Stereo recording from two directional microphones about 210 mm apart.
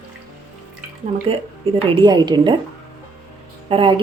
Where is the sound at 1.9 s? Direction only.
20° right (ahead or behind).